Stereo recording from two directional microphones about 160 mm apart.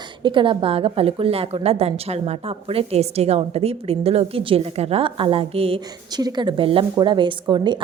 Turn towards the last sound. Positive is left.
turn(degrees=-30)  # may be behind; listen again after turning